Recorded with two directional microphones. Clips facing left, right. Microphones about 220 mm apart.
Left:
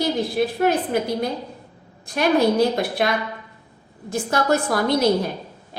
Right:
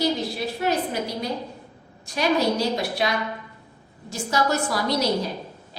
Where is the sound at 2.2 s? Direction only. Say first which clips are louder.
Left 5 dB; 55° left (ahead or behind).